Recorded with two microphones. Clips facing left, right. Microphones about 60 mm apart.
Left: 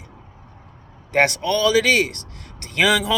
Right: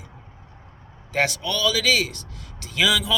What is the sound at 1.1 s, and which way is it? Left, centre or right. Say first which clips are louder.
Speech: left 5 dB; left.